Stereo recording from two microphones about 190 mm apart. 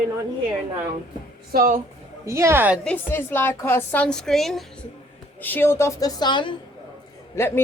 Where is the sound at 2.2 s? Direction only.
15° right (ahead or behind).